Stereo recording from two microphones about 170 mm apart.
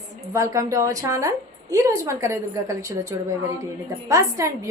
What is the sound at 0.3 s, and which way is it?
A woman's voice, 20° right (ahead or behind).